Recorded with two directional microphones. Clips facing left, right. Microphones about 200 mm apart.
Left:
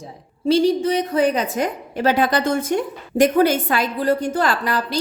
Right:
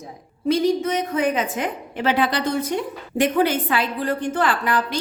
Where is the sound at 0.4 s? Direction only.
30° left (ahead or behind).